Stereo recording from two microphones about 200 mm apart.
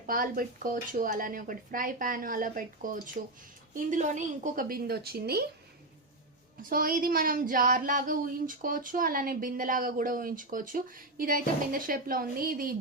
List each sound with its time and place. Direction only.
0.1 s speech: 45° right (ahead or behind)
6.7 s speech: 45° right (ahead or behind)